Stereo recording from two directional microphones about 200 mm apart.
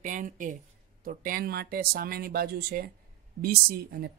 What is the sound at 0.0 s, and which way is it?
Speech, 40° right (ahead or behind).